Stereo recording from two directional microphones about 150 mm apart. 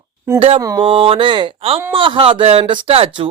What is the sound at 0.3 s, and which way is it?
Speech, 40° right (ahead or behind).